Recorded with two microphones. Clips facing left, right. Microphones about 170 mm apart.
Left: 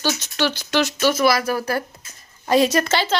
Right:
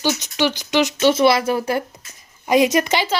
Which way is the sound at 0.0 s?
15° right (ahead or behind).